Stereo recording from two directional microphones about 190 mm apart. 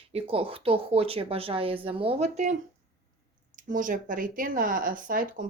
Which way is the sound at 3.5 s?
45° right (ahead or behind).